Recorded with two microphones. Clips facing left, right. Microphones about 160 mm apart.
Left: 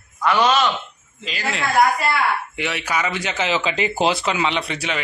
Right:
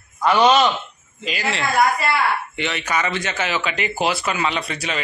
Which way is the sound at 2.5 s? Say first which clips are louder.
Right 1 dB; 10° left (ahead or behind).